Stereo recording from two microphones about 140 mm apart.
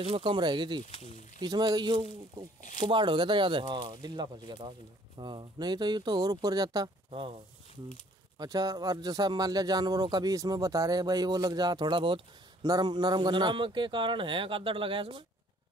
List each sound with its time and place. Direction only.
0.0 s speech: 40° right (ahead or behind)
7.1 s speech: 40° right (ahead or behind)
8.4 s speech: 25° right (ahead or behind)